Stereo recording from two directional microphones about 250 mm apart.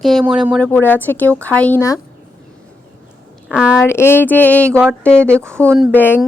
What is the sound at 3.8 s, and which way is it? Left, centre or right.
A woman's voice, centre.